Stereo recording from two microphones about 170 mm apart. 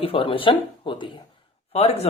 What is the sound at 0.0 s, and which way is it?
Speech, 30° left (ahead or behind).